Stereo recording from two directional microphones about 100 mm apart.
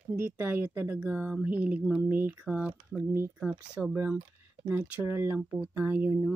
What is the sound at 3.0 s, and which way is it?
Speech, 25° right (ahead or behind).